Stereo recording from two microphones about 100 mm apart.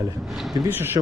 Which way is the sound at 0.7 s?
20° right (ahead or behind).